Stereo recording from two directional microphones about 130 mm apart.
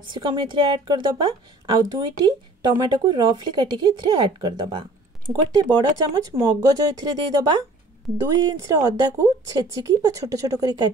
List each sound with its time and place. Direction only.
0.1 s a woman's voice: 40° right (ahead or behind)